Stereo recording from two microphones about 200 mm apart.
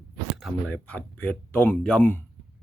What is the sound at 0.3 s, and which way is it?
Speech, 5° left (ahead or behind).